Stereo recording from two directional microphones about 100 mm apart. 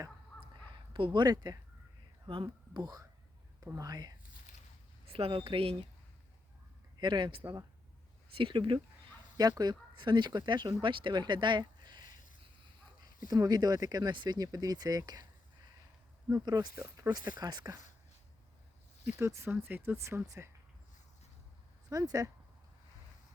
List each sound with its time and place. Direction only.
0.7 s speech: 55° right (ahead or behind); by 4.1 s 40° right (ahead or behind)
5.0 s speech: 70° right (ahead or behind)
7.0 s speech: 50° right (ahead or behind)
9.4 s speech: 40° right (ahead or behind)
13.2 s speech: 40° right (ahead or behind)
16.3 s speech: 40° right (ahead or behind)
19.0 s speech: 25° right (ahead or behind)
21.8 s speech: 35° right (ahead or behind)